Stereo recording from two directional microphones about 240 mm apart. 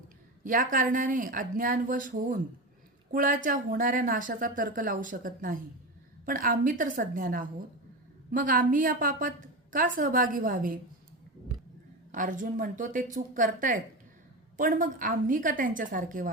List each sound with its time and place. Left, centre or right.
0.4 s speech: right
12.1 s speech: right